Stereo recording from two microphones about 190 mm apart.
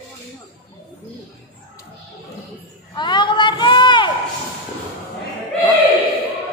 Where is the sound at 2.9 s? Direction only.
25° left (ahead or behind).